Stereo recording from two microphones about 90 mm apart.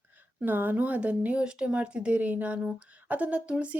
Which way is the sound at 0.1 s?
20° right (ahead or behind).